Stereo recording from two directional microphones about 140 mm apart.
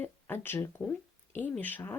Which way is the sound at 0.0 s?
15° left (ahead or behind).